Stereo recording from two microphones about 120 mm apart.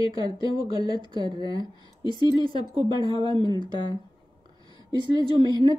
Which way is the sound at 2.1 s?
35° left (ahead or behind).